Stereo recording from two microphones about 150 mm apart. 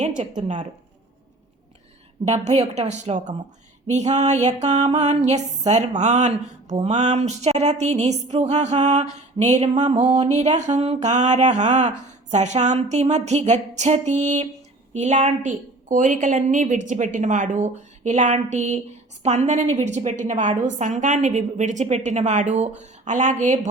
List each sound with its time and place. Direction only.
0.3 s music: 50° right (ahead or behind)
2.2 s music: 50° right (ahead or behind)
14.9 s a woman's voice: 50° right (ahead or behind)
19.2 s music: 45° right (ahead or behind)
22.8 s a woman's voice: 55° right (ahead or behind)